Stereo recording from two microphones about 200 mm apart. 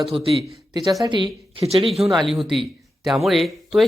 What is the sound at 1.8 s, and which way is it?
Speech, centre (ahead or behind).